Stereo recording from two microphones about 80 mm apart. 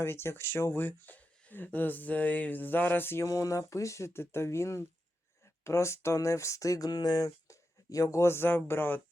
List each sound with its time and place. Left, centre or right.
0.0 s speech: left
3.2 s speech: left